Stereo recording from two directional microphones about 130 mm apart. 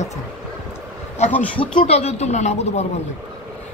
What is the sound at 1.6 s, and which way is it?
Speech, 40° left (ahead or behind).